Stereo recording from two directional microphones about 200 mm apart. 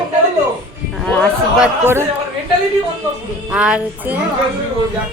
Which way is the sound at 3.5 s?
5° right (ahead or behind).